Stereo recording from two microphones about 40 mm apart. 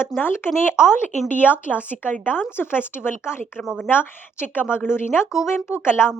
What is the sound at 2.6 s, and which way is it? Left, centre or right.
Speech, left.